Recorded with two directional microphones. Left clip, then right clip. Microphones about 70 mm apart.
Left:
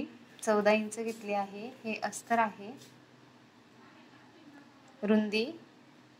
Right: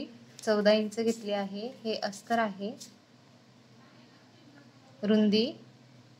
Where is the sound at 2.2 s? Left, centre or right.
Left.